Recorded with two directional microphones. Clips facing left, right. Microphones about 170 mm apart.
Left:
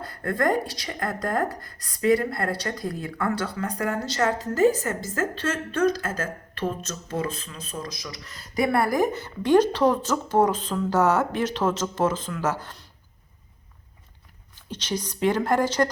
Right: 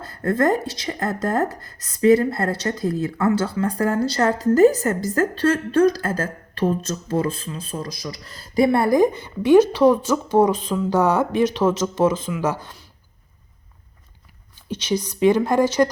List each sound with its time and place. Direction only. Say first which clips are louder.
0.0 s a woman's voice: right 5 dB; 25° right (ahead or behind)
14.8 s a woman's voice: right 6 dB; 10° right (ahead or behind)